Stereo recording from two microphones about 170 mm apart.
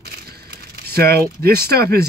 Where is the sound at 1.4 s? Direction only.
65° right (ahead or behind).